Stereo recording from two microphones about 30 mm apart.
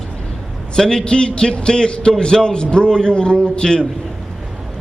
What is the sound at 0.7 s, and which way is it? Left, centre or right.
A man's voice, left.